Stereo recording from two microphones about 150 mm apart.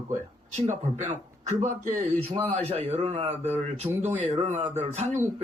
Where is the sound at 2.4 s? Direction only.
40° right (ahead or behind).